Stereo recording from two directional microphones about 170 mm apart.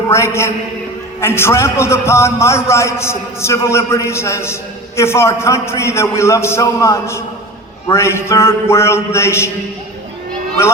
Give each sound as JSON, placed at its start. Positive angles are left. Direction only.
{"t": 0.1, "sound": "a man's voice", "side_deg": 15}